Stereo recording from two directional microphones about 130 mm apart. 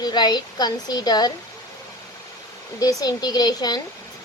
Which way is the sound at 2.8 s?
30° left (ahead or behind).